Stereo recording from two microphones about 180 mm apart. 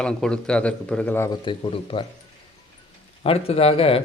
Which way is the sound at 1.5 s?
30° left (ahead or behind).